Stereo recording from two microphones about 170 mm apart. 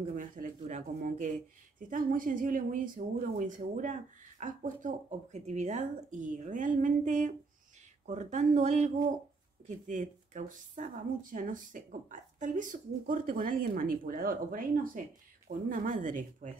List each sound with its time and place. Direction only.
0.1 s speech: 50° right (ahead or behind)